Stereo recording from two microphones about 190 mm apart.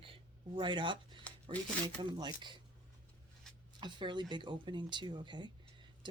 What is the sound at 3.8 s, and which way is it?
Speech, 25° right (ahead or behind).